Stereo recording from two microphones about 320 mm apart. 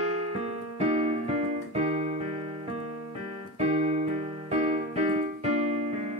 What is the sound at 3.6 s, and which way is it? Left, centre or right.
Keyboard, centre.